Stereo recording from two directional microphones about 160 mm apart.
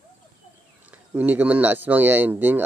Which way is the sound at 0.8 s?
10° right (ahead or behind).